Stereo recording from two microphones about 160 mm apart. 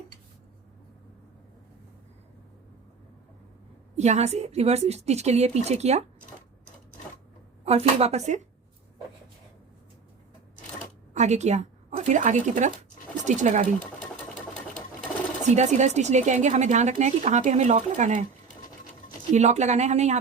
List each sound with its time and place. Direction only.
3.9 s speech: 45° right (ahead or behind)
7.6 s speech: 40° right (ahead or behind)
11.1 s a woman's voice: 45° right (ahead or behind)
15.4 s speech: 45° right (ahead or behind)
19.3 s speech: 45° right (ahead or behind)